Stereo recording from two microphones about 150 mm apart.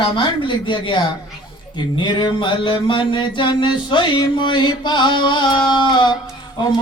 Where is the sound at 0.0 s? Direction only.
30° left (ahead or behind).